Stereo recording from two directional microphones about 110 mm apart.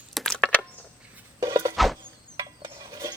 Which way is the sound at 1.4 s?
30° right (ahead or behind).